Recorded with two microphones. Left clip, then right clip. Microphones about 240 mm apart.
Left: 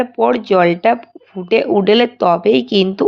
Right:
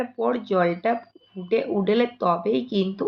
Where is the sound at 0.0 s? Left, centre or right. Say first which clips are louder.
Left 10 dB; left.